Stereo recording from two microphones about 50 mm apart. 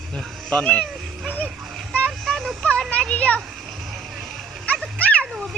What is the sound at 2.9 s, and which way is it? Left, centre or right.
Children playing, left.